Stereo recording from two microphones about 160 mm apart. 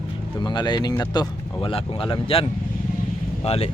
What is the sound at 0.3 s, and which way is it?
Speech, 30° left (ahead or behind).